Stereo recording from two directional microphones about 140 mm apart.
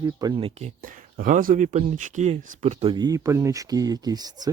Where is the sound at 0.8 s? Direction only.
75° right (ahead or behind); by 2.9 s 50° right (ahead or behind).